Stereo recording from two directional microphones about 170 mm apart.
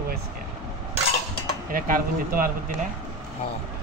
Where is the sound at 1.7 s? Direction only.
55° right (ahead or behind).